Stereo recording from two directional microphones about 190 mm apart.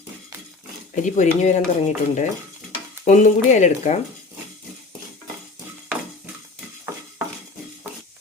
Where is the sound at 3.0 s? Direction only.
40° left (ahead or behind).